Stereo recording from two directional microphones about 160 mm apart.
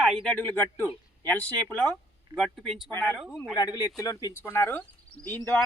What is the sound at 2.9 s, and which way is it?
Speech, 10° left (ahead or behind).